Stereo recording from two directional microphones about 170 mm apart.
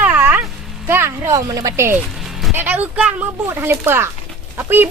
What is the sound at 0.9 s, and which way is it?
Speech, 15° right (ahead or behind).